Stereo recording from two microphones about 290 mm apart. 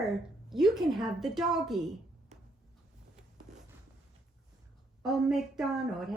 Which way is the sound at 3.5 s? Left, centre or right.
Right.